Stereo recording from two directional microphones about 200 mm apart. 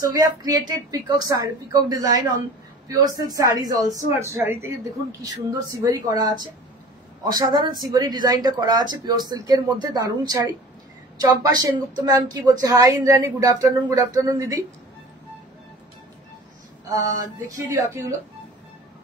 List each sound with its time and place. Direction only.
0.0 s speech: 15° right (ahead or behind)
16.9 s speech: 15° right (ahead or behind)